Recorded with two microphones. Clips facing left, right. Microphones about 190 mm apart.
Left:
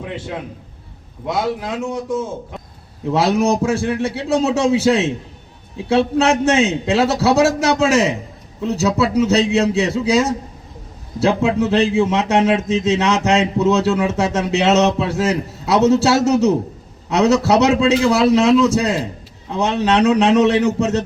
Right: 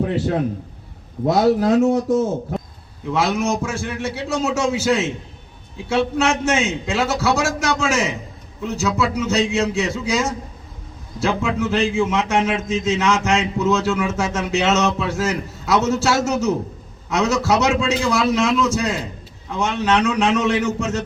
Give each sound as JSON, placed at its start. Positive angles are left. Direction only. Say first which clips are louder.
{"t": 0.0, "sound": "a man's voice", "louder": "right 7 dB", "side_deg": -40}
{"t": 3.1, "sound": "a man's voice", "louder": "left 4 dB", "side_deg": 35}